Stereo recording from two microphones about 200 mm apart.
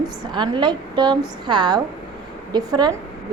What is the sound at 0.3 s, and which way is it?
Speech, 20° right (ahead or behind).